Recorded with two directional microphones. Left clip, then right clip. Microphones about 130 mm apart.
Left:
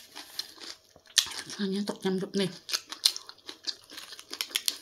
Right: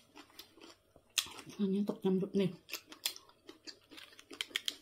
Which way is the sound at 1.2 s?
15° right (ahead or behind).